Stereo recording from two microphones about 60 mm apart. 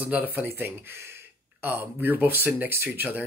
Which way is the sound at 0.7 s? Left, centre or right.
Right.